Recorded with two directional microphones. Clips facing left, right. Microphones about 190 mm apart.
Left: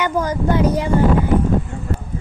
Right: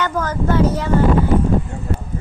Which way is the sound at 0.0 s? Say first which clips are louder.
Left 1 dB; 10° left (ahead or behind).